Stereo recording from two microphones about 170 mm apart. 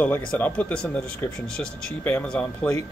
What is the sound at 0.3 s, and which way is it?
Speech, 10° left (ahead or behind).